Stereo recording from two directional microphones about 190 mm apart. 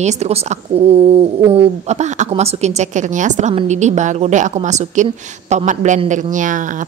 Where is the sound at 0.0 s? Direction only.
35° right (ahead or behind).